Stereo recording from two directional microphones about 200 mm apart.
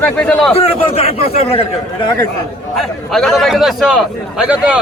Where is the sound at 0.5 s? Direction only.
30° left (ahead or behind).